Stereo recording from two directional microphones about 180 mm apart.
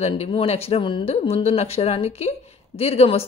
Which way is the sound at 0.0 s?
35° left (ahead or behind).